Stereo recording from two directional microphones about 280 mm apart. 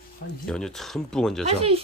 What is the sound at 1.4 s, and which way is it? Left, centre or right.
Speech, right.